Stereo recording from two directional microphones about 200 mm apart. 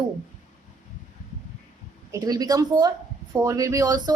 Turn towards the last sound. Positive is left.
turn(degrees=-15)  # may be behind; listen again after turning